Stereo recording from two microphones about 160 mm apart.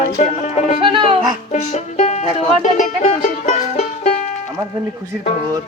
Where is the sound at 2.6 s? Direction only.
50° left (ahead or behind).